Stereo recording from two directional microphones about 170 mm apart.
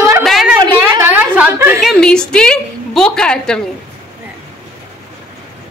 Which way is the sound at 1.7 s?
Centre (ahead or behind).